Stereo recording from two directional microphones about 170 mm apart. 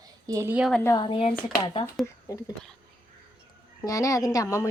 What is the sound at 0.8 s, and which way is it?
Speech, 25° left (ahead or behind).